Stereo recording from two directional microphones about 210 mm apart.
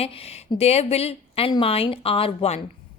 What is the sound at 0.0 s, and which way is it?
A woman's voice, 30° left (ahead or behind).